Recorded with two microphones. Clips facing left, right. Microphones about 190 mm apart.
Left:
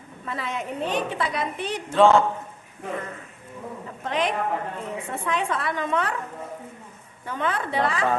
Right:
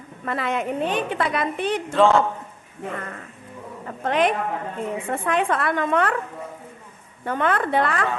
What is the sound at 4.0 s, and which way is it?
A woman's voice, 55° right (ahead or behind).